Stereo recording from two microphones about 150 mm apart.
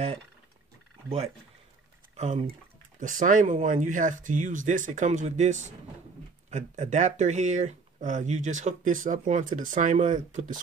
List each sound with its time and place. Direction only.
2.1 s speech: 55° right (ahead or behind)